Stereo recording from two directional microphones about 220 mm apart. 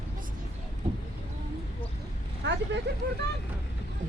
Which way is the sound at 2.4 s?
50° right (ahead or behind).